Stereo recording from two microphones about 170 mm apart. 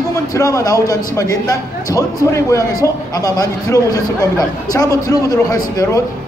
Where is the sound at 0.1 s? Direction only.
20° left (ahead or behind).